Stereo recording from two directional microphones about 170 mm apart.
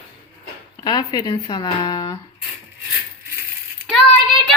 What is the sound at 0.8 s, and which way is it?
Speech, 25° left (ahead or behind).